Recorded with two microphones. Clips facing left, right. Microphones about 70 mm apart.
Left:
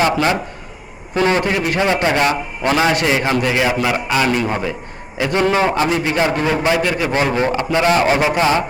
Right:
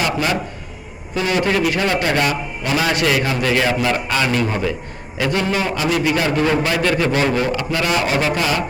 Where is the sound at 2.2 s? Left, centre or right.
Left.